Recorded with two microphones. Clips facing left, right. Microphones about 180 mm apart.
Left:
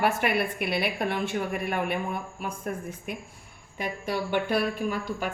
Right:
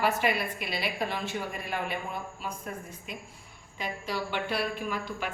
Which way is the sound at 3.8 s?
55° left (ahead or behind).